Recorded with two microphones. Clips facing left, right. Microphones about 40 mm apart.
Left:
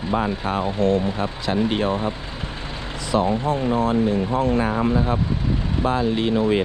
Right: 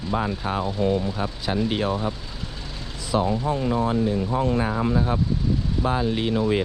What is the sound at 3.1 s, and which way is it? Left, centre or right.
Speech, left.